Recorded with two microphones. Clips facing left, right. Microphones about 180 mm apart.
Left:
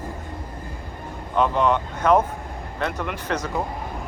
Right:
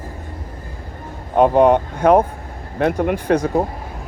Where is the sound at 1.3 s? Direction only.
50° right (ahead or behind).